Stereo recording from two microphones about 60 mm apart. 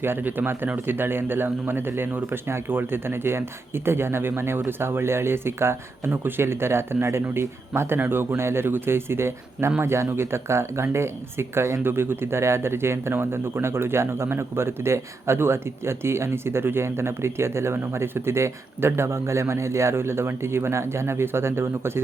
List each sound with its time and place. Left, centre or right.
0.0 s a man's voice: right